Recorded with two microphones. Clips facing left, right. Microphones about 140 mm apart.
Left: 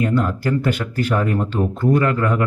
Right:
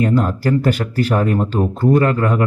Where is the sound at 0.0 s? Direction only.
40° right (ahead or behind).